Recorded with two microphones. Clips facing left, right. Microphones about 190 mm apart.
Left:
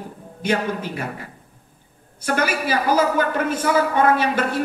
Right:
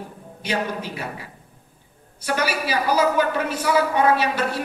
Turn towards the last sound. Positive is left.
turn(degrees=50)  # may be behind; listen again after turning